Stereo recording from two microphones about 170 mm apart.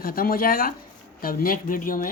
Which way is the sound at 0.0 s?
60° left (ahead or behind).